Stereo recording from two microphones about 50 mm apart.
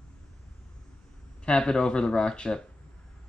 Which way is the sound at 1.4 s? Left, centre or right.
Centre.